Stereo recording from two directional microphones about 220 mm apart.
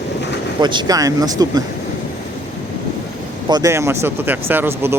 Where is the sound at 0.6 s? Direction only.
20° right (ahead or behind).